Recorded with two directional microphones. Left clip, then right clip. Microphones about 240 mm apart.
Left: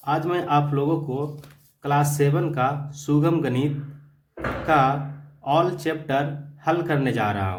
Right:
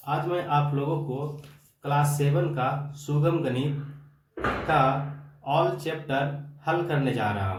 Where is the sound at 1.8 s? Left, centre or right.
Left.